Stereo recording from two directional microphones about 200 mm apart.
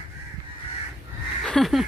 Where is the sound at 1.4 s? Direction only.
Centre (ahead or behind).